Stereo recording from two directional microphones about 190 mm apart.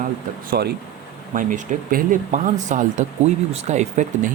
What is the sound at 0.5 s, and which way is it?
Speech, 55° right (ahead or behind).